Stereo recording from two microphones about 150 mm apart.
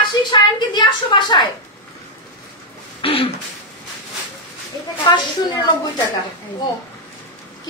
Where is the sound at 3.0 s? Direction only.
40° left (ahead or behind).